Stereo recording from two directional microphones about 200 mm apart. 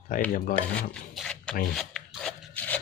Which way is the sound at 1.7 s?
Centre (ahead or behind).